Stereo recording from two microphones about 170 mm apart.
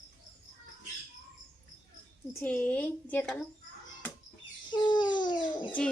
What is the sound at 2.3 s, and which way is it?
Speech, 10° left (ahead or behind).